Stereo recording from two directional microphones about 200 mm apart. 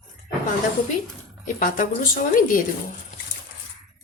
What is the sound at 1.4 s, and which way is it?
A woman's voice, 45° left (ahead or behind).